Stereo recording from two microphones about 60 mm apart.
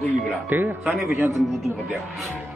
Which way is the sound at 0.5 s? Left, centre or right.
Right.